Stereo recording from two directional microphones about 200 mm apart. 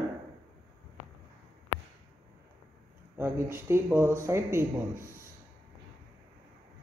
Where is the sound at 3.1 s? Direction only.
10° right (ahead or behind).